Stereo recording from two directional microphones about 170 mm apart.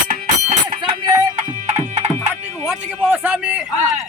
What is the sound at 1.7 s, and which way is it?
Music, 45° right (ahead or behind).